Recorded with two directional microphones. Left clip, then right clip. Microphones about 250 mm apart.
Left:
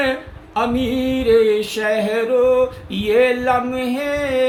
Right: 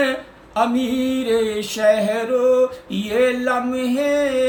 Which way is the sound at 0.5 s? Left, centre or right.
Centre.